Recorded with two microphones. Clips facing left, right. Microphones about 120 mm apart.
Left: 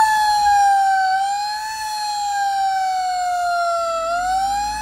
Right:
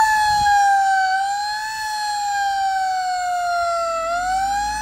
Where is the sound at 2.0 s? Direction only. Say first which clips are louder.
Even; 5° left (ahead or behind).